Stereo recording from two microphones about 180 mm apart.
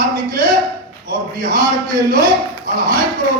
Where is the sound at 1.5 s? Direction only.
20° right (ahead or behind).